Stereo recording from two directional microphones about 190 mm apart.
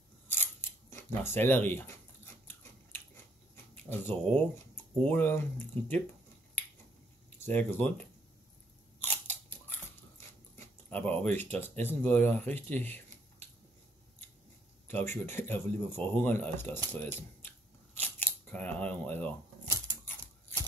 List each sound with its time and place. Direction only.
0.3 s camera: 10° left (ahead or behind)
3.5 s a sound: 10° left (ahead or behind)
4.9 s speech: 10° left (ahead or behind)
7.5 s speech: 10° left (ahead or behind)
10.5 s speech: 10° left (ahead or behind)
14.9 s speech: 10° left (ahead or behind)
17.9 s scissors: 10° left (ahead or behind)